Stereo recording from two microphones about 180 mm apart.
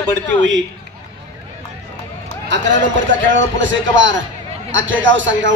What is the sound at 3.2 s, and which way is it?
A man's voice, 90° right.